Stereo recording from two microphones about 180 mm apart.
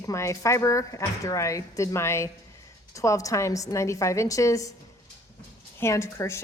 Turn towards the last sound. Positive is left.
turn(degrees=15)  # may be behind; listen again after turning